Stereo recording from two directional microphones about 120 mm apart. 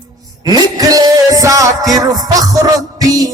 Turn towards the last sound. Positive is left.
turn(degrees=-30)  # may be behind; listen again after turning